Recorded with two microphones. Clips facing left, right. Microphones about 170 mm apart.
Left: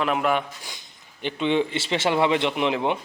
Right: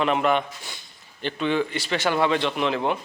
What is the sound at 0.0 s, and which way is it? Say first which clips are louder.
A man's voice: right 1 dB; 5° left (ahead or behind).